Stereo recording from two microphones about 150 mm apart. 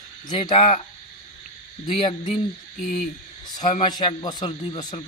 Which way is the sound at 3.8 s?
30° left (ahead or behind).